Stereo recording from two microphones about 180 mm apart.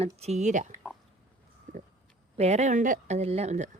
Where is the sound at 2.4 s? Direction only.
40° right (ahead or behind).